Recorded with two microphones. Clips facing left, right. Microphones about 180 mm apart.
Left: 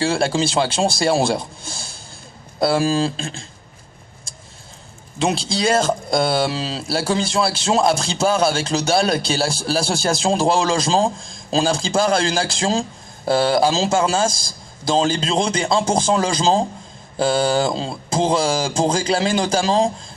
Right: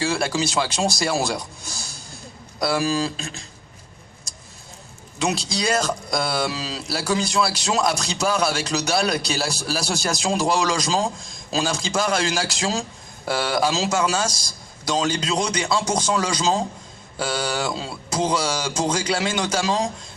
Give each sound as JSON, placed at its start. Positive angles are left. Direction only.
{"t": 0.0, "sound": "speech", "side_deg": 30}
{"t": 5.2, "sound": "speech", "side_deg": 30}